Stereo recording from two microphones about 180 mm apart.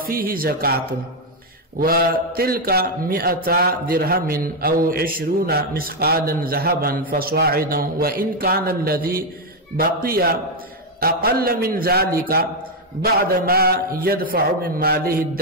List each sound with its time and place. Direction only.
0.0 s a man's voice: 55° right (ahead or behind)